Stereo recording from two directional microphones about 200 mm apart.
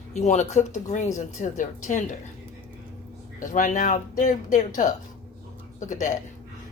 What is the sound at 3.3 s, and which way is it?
Speech, 40° left (ahead or behind).